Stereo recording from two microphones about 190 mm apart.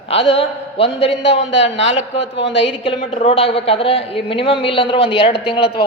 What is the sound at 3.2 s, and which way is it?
A man's voice, 30° left (ahead or behind).